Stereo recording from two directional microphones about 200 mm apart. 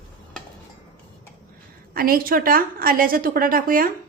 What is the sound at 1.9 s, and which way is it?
A woman's voice, 45° right (ahead or behind).